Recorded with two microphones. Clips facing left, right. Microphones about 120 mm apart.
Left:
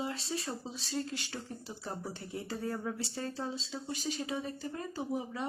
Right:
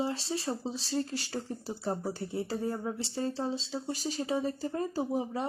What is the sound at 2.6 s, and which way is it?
Speech, 20° right (ahead or behind).